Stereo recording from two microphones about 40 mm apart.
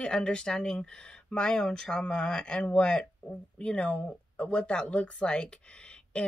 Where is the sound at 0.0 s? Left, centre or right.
Left.